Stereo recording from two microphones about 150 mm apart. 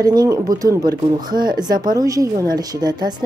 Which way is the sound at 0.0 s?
25° right (ahead or behind).